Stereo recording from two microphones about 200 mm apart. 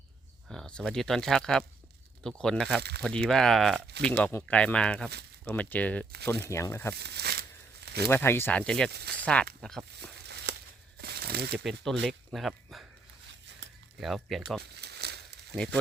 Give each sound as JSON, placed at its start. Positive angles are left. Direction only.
{"t": 0.4, "sound": "speech", "side_deg": 0}
{"t": 3.9, "sound": "speech", "side_deg": -55}
{"t": 4.2, "sound": "speech", "side_deg": 10}
{"t": 6.9, "sound": "a sound", "side_deg": -55}
{"t": 8.0, "sound": "speech", "side_deg": 10}
{"t": 8.9, "sound": "speech", "side_deg": -55}
{"t": 9.2, "sound": "speech", "side_deg": 5}
{"t": 10.0, "sound": "a sound", "side_deg": -55}
{"t": 11.5, "sound": "speech", "side_deg": 0}
{"t": 14.0, "sound": "speech", "side_deg": 0}
{"t": 14.6, "sound": "crumpling", "side_deg": -55}
{"t": 15.5, "sound": "speech", "side_deg": 5}